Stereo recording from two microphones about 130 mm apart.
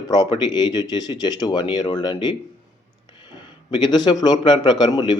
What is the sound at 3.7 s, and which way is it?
Speech, 35° left (ahead or behind).